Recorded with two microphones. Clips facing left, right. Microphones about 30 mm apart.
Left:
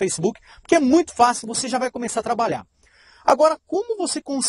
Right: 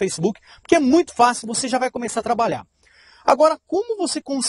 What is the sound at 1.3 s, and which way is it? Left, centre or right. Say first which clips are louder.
Speech: right 2 dB; right.